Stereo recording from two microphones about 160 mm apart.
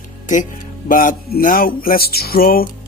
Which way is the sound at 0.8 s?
55° left (ahead or behind).